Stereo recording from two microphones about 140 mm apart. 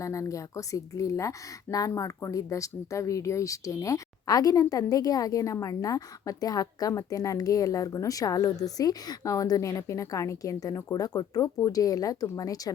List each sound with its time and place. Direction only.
0.0 s speech: 25° left (ahead or behind)